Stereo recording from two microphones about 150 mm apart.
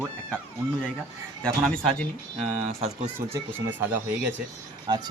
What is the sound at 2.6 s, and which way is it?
Speech, 45° right (ahead or behind).